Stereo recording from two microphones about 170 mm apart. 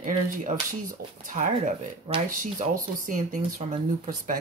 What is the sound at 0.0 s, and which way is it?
Speech, 50° right (ahead or behind).